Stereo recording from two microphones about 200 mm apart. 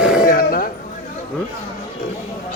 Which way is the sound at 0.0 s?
5° right (ahead or behind).